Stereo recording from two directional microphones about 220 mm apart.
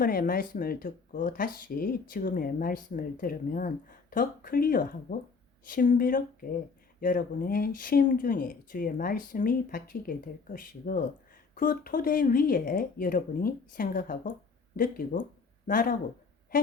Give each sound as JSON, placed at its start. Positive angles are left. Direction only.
{"t": 0.0, "sound": "speech", "side_deg": 40}